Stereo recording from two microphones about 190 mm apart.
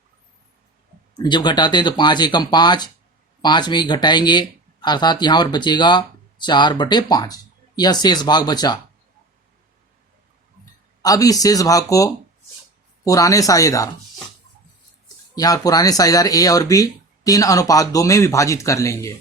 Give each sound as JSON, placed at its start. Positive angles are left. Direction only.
{"t": 1.1, "sound": "speech", "side_deg": 20}
{"t": 11.0, "sound": "speech", "side_deg": 20}
{"t": 15.4, "sound": "speech", "side_deg": 20}